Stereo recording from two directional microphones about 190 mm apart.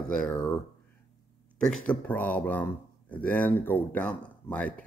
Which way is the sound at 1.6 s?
5° left (ahead or behind).